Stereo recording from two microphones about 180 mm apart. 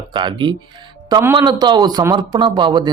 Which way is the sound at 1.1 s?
10° right (ahead or behind).